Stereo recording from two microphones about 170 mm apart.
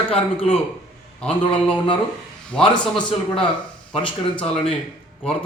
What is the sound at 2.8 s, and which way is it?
Speech, 5° left (ahead or behind).